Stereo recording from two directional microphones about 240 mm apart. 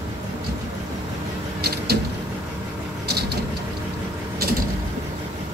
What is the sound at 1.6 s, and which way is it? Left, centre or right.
Vehicle, right.